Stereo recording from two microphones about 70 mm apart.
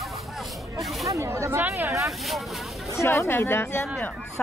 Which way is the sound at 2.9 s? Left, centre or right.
Left.